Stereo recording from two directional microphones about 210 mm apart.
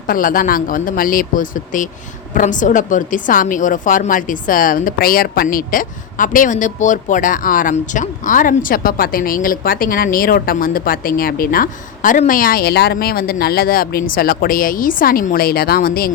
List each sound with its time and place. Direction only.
0.1 s a man's voice: 40° left (ahead or behind)